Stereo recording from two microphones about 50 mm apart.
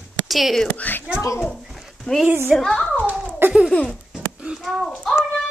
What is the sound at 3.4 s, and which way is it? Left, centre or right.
Laughter, right.